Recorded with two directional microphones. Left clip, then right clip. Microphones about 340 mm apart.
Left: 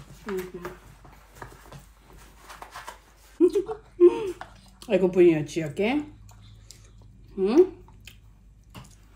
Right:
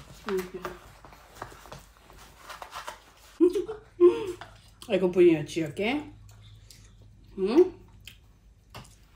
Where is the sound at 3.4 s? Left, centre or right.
Centre.